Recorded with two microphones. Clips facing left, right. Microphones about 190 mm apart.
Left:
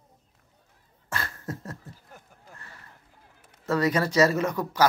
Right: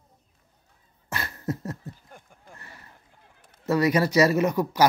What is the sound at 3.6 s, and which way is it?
Speech, 10° right (ahead or behind).